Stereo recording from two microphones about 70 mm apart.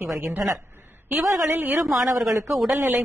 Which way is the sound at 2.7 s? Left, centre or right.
Right.